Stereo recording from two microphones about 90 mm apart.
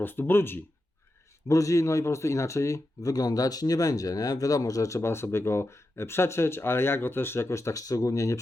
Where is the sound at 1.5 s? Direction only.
35° left (ahead or behind).